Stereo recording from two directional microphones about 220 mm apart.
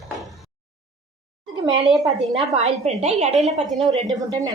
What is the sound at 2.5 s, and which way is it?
A woman's voice, 30° right (ahead or behind).